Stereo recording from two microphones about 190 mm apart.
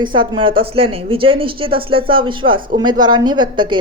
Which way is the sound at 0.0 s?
25° right (ahead or behind).